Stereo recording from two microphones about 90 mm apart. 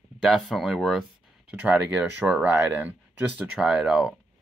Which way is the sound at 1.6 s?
15° right (ahead or behind).